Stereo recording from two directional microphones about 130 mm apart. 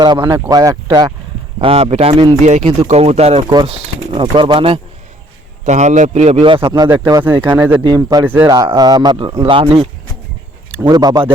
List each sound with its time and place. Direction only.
0.0 s speech: 35° right (ahead or behind)
1.6 s speech: 50° right (ahead or behind)
2.4 s speech: 65° right (ahead or behind)
3.7 s speech: 40° right (ahead or behind)
5.6 s speech: 65° right (ahead or behind)
6.4 s speech: 45° right (ahead or behind)
6.7 s speech: 25° right (ahead or behind)
7.2 s speech: 15° right (ahead or behind)
7.9 s speech: 35° right (ahead or behind)
10.8 s speech: 30° right (ahead or behind)